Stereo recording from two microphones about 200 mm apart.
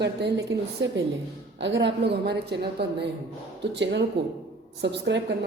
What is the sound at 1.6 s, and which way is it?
A woman's voice, 60° right (ahead or behind).